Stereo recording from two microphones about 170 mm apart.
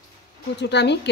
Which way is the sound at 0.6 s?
90° left.